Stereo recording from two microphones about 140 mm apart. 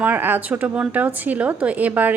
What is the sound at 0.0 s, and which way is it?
A woman's voice, 15° right (ahead or behind).